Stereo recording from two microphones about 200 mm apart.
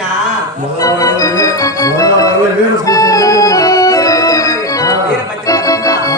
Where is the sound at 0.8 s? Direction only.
15° left (ahead or behind).